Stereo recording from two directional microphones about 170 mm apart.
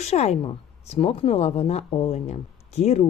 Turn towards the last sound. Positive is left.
turn(degrees=40)  # may be behind; listen again after turning